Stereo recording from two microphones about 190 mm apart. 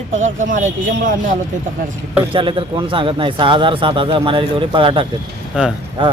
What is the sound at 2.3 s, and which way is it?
Speech, 25° right (ahead or behind).